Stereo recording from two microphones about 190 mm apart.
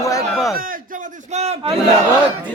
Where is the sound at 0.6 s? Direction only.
45° right (ahead or behind).